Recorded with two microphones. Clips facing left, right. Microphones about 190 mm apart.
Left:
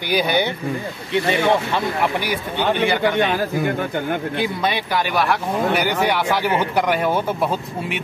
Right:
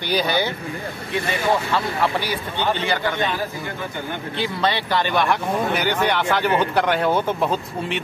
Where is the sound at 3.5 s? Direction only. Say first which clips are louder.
Left 8 dB; 60° left (ahead or behind).